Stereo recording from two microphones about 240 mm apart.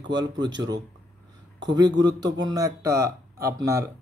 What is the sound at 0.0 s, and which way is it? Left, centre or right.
Speech, centre.